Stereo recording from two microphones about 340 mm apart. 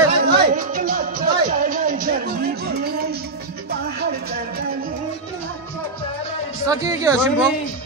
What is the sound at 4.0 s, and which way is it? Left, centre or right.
Speech, right.